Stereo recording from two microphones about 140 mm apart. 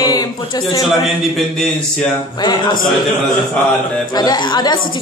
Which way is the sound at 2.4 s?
30° left (ahead or behind).